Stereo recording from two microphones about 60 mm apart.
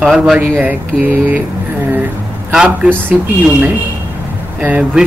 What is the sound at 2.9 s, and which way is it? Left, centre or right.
Speech, right.